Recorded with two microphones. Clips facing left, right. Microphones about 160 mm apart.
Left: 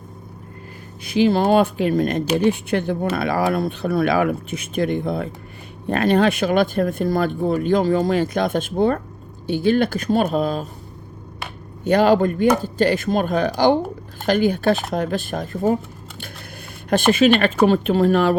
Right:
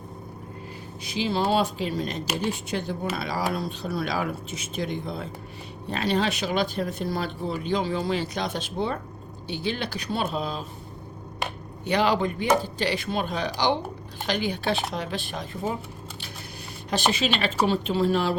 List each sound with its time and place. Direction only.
1.0 s speech: 55° left (ahead or behind)
11.9 s speech: 45° left (ahead or behind)
16.9 s speech: 55° left (ahead or behind)